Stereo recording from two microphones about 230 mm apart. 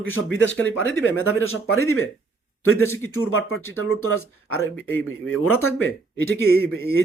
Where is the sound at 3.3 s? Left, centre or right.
Left.